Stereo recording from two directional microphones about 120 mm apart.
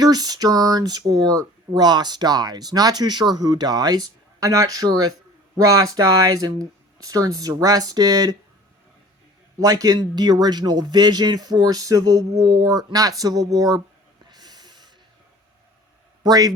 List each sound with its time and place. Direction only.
0.0 s speech: 35° right (ahead or behind)
9.6 s speech: 30° right (ahead or behind)
14.3 s snort: 35° right (ahead or behind)
16.2 s speech: 30° right (ahead or behind)